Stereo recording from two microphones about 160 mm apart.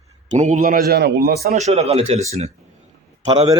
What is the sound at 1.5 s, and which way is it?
Speech, 45° right (ahead or behind).